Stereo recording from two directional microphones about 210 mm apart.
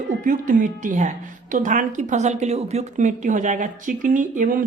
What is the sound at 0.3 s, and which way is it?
A woman's voice, 40° right (ahead or behind).